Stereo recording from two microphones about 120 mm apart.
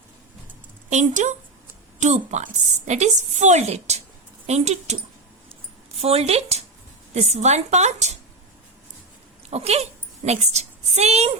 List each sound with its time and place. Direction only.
0.9 s a woman's voice: 85° right; by 4.9 s 65° right (ahead or behind)
6.0 s a woman's voice: 55° right (ahead or behind); by 8.1 s 75° right (ahead or behind)
9.5 s a woman's voice: 60° right (ahead or behind)